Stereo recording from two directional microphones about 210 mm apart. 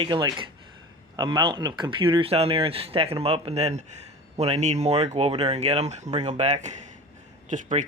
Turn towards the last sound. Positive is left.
turn(degrees=-35)  # may be behind; listen again after turning